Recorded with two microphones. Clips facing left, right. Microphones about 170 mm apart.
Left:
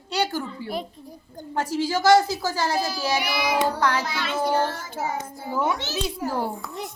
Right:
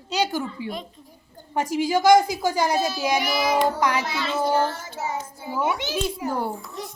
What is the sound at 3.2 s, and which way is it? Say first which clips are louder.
Child singing: right 2 dB; 45° right (ahead or behind).